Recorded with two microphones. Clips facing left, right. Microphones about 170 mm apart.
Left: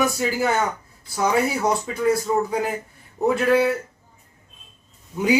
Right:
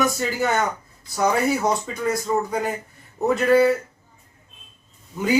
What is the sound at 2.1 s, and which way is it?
A man's voice, 5° left (ahead or behind).